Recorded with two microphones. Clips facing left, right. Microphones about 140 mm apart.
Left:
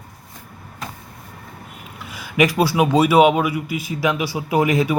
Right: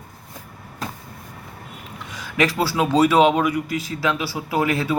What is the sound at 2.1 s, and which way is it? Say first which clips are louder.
A man's voice: left 4 dB; 10° left (ahead or behind).